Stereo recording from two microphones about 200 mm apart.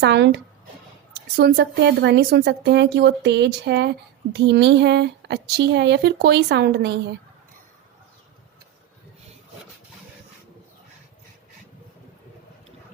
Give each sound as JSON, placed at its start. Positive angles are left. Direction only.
{"t": 0.0, "sound": "speech", "side_deg": -60}
{"t": 1.4, "sound": "speech", "side_deg": -55}